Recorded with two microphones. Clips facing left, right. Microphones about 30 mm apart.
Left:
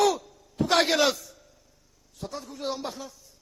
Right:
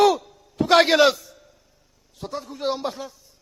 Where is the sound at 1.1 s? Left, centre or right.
Centre.